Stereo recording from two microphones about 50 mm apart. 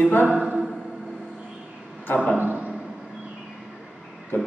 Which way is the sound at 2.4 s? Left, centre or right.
Right.